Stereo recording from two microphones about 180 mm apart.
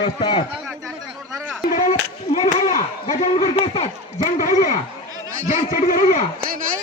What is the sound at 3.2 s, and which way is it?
Speech, 30° left (ahead or behind).